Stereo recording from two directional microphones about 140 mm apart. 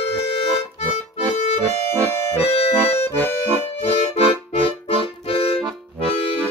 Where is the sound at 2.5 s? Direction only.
45° left (ahead or behind).